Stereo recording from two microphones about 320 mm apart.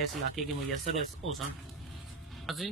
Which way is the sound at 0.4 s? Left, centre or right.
Centre.